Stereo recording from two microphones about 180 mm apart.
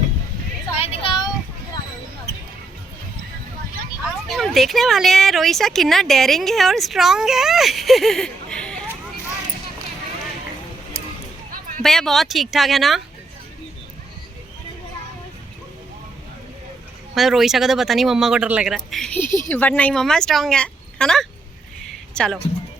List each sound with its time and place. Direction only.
0.8 s a sound: 30° left (ahead or behind)
4.3 s speech: centre (ahead or behind)
11.8 s speech: centre (ahead or behind)
17.2 s speech: centre (ahead or behind)